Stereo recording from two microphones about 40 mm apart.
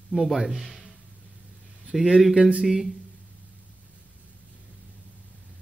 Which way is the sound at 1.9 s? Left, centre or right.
Centre.